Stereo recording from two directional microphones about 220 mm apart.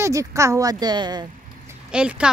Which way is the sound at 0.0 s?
15° right (ahead or behind).